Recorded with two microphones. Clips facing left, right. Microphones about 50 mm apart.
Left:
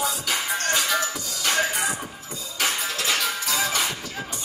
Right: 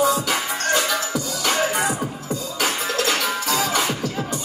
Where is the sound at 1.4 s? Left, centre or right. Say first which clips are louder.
Right 2 dB; right.